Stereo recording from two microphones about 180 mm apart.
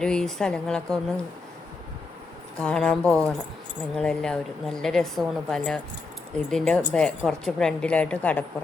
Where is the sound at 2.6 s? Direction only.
5° left (ahead or behind).